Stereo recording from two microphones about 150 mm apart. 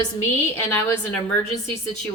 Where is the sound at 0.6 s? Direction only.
15° left (ahead or behind).